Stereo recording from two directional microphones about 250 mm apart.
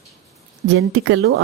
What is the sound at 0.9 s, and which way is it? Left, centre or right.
Speech, right.